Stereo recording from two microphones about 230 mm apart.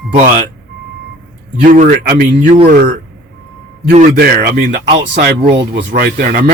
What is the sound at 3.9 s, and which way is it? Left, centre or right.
Speech, right.